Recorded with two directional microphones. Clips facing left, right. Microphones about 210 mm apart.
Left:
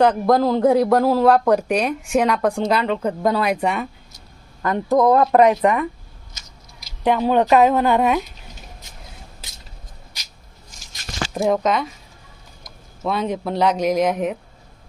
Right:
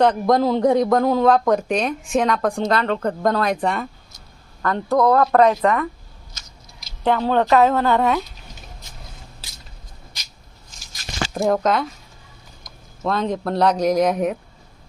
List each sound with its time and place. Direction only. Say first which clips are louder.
0.0 s speech: left 1 dB; 5° left (ahead or behind)
11.3 s speech: even; centre (ahead or behind)